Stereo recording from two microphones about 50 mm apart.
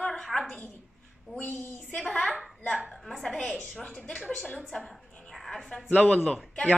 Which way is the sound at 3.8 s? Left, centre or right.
Centre.